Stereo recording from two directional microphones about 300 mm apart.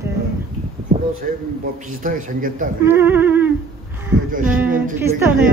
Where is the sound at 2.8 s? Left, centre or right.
Centre.